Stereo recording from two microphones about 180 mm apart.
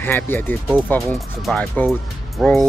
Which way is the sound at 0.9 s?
5° left (ahead or behind).